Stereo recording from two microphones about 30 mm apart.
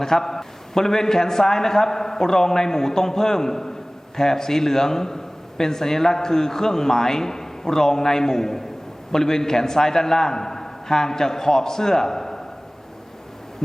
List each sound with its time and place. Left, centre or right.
0.0 s a man's voice: centre